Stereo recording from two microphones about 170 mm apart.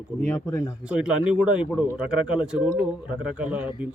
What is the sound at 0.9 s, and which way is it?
Speech, 5° right (ahead or behind).